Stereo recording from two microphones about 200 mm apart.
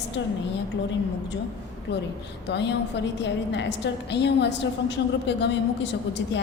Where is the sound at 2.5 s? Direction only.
60° left (ahead or behind).